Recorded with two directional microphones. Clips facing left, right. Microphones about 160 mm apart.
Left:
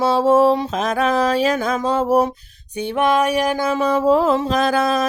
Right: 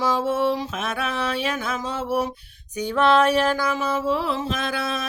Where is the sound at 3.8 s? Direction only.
40° left (ahead or behind).